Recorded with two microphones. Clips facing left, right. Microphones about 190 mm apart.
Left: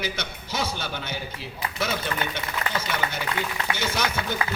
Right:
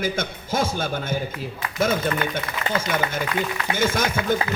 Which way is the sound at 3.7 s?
50° right (ahead or behind).